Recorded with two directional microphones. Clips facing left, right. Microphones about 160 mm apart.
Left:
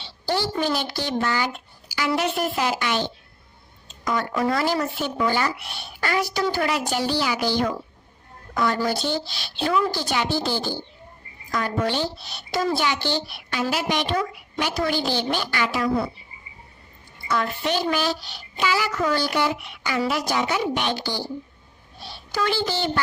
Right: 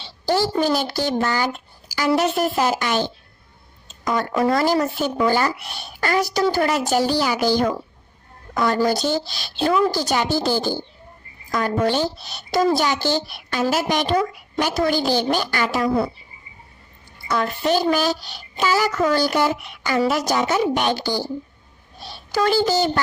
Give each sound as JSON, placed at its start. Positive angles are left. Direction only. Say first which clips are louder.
{"t": 0.0, "sound": "a woman's voice", "louder": "right 5 dB", "side_deg": -40}
{"t": 17.2, "sound": "a woman's voice", "louder": "right 4 dB", "side_deg": -40}